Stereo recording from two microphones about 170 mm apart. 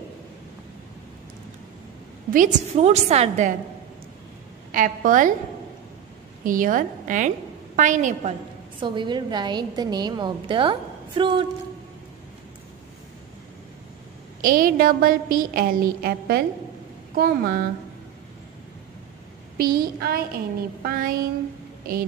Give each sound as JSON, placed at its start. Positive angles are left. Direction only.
{"t": 2.3, "sound": "a woman's voice", "side_deg": -45}
{"t": 4.7, "sound": "a woman's voice", "side_deg": -50}
{"t": 6.4, "sound": "a woman's voice", "side_deg": -50}
{"t": 14.4, "sound": "a woman's voice", "side_deg": -55}
{"t": 19.5, "sound": "a woman's voice", "side_deg": -60}